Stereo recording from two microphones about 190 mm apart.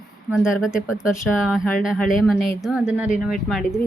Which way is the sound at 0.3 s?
5° right (ahead or behind).